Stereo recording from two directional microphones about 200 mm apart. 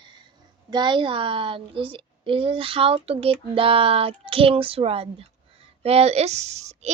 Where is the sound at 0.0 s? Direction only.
25° right (ahead or behind).